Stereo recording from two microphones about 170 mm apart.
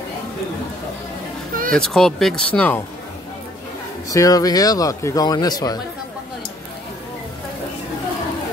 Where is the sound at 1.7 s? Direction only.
5° left (ahead or behind).